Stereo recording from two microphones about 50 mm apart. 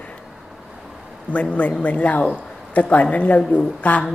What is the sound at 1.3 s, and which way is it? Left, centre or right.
A woman's voice, left.